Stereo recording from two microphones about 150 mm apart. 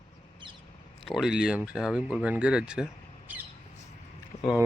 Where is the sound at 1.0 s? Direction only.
Centre (ahead or behind).